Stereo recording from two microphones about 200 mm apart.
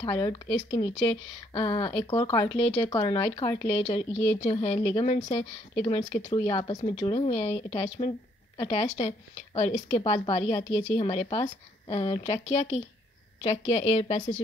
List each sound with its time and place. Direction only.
0.0 s speech: 25° left (ahead or behind)
10.6 s a woman's voice: 65° left (ahead or behind)
11.0 s speech: 30° left (ahead or behind)